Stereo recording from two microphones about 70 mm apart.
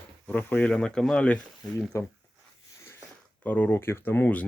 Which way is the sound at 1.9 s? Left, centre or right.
Left.